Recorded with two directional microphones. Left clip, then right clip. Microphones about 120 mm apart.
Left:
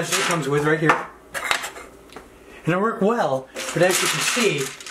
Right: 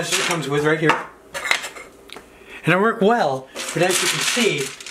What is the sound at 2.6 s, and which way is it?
Speech, 40° right (ahead or behind).